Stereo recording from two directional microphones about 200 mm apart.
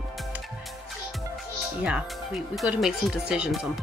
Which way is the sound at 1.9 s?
Centre (ahead or behind).